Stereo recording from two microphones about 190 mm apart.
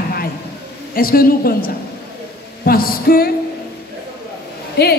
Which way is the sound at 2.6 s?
50° left (ahead or behind).